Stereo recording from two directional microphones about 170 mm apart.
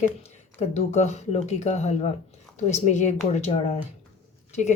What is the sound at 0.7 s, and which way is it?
Speech, 40° left (ahead or behind).